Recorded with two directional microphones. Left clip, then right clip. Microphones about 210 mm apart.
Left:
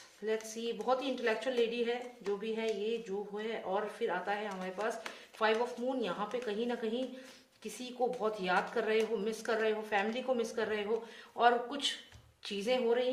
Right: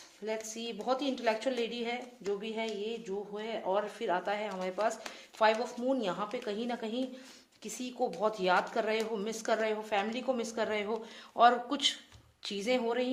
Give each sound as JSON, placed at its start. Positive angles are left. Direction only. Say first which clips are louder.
{"t": 0.3, "sound": "speech", "louder": "left 1 dB", "side_deg": -45}